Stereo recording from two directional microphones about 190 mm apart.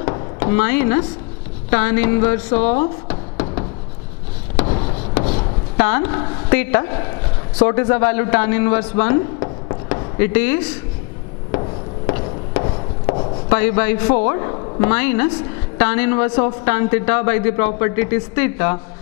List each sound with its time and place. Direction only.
0.4 s a woman's voice: 15° left (ahead or behind)
4.6 s a sound: 30° left (ahead or behind)
5.2 s chopping: 35° left (ahead or behind)
5.8 s a woman's voice: 15° left (ahead or behind)
12.1 s a sound: 20° left (ahead or behind)
13.5 s a man's voice: 10° left (ahead or behind)